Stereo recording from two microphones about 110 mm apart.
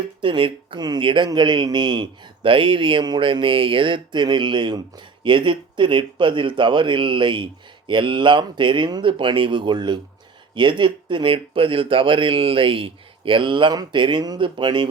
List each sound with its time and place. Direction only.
0.2 s speech: 50° right (ahead or behind)